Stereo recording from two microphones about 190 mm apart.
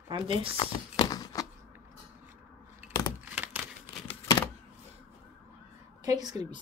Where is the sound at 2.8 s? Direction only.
10° right (ahead or behind).